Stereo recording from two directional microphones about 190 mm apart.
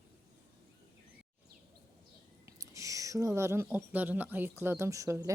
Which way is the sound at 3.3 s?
15° right (ahead or behind).